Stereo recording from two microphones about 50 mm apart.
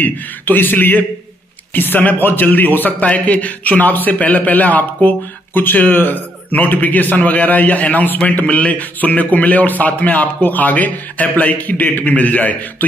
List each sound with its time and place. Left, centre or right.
0.0 s a man's voice: left
3.0 s a man's voice: left